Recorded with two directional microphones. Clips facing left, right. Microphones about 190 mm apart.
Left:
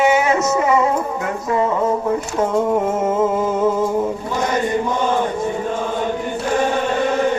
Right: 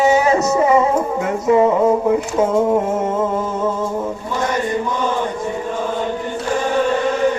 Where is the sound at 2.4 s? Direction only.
Centre (ahead or behind).